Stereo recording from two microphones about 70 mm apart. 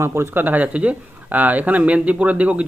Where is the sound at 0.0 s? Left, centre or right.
Right.